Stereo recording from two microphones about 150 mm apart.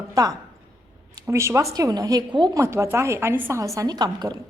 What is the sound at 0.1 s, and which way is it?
A woman's voice, 25° right (ahead or behind).